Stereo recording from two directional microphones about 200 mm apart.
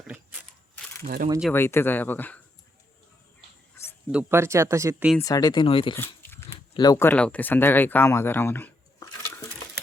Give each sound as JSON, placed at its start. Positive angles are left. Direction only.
{"t": 1.0, "sound": "speech", "side_deg": -45}
{"t": 1.5, "sound": "speech", "side_deg": 10}
{"t": 4.1, "sound": "speech", "side_deg": -10}
{"t": 5.1, "sound": "speech", "side_deg": 15}
{"t": 6.0, "sound": "speech", "side_deg": 10}